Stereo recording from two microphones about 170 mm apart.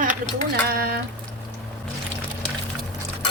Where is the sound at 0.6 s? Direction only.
65° right (ahead or behind).